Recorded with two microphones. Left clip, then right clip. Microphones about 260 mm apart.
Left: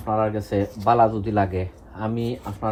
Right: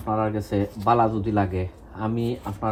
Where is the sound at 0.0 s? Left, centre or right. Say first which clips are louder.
Left 2 dB; centre.